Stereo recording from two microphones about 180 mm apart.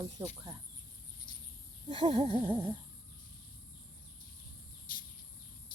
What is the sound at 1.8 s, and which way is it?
Speech, 25° right (ahead or behind).